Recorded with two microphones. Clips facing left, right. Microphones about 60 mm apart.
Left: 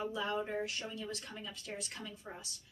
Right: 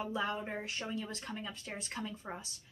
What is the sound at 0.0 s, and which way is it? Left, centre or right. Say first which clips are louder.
Speech: even; right.